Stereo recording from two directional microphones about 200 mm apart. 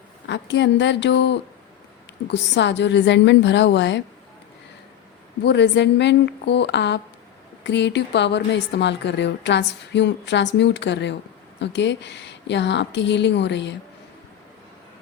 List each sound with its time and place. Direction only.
0.3 s a woman's voice: 60° left (ahead or behind)
5.4 s a woman's voice: 60° left (ahead or behind)